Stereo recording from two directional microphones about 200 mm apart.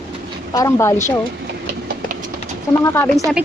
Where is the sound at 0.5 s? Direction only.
15° left (ahead or behind).